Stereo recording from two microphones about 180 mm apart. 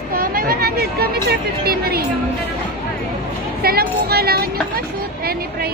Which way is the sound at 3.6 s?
60° right (ahead or behind).